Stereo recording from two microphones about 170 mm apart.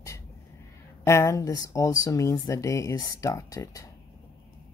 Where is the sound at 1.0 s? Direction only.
15° left (ahead or behind).